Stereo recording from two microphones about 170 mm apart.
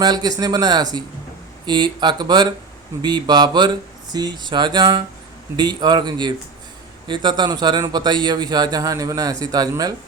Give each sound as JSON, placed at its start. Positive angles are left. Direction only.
{"t": 0.0, "sound": "speech", "side_deg": -25}